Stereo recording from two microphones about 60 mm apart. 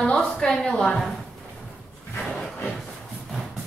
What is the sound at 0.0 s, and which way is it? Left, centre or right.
A woman's voice, centre.